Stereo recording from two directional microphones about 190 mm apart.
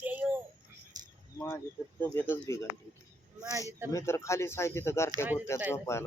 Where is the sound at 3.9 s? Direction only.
15° left (ahead or behind).